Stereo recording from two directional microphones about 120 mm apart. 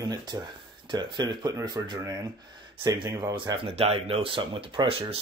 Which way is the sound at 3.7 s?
60° right (ahead or behind).